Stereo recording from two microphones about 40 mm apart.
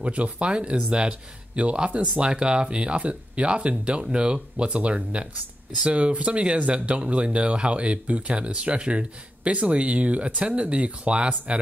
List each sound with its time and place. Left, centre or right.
0.0 s speech: right